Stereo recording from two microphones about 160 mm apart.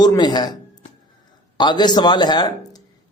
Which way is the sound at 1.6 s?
25° left (ahead or behind).